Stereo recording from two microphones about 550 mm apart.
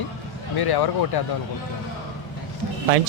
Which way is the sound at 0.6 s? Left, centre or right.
Left.